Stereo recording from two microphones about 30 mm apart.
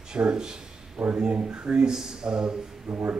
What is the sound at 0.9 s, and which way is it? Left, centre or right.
Speech, right.